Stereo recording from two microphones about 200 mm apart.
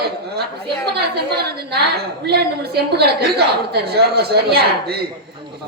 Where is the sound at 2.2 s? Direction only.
55° right (ahead or behind).